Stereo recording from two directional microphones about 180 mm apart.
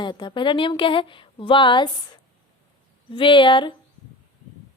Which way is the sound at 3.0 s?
30° left (ahead or behind).